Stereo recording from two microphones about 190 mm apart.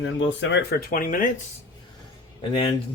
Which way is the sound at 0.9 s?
45° left (ahead or behind).